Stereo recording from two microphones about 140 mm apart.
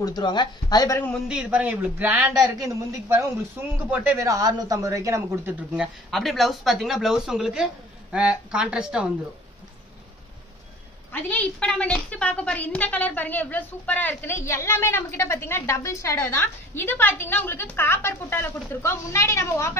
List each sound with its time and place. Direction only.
0.0 s speech: 30° left (ahead or behind)
1.3 s speech: 5° right (ahead or behind)
5.7 s speech: 5° right (ahead or behind)
11.1 s a woman's voice: 10° left (ahead or behind)